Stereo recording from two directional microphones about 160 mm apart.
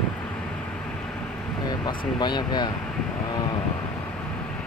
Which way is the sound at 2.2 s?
25° left (ahead or behind).